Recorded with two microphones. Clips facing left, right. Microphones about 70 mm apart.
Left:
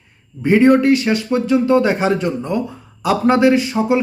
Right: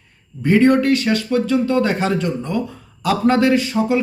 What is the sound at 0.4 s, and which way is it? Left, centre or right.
Speech, centre.